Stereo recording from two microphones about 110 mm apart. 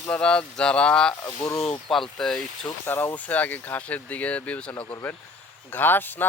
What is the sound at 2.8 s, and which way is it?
Speech, 15° left (ahead or behind).